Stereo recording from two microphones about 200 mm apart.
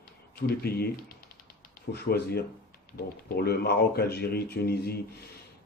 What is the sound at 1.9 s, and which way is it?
Speech, 55° left (ahead or behind).